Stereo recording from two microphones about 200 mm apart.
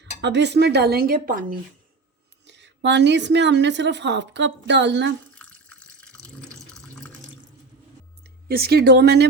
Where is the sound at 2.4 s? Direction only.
60° right (ahead or behind).